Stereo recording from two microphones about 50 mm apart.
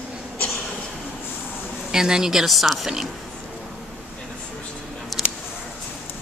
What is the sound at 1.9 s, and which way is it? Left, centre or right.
A woman's voice, centre.